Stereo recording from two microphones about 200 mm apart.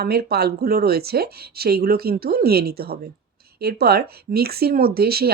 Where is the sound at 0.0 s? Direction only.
50° right (ahead or behind).